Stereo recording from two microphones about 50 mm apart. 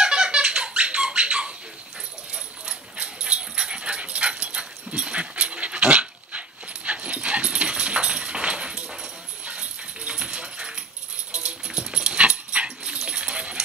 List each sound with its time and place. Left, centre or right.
0.0 s squeak: centre
2.3 s dog: centre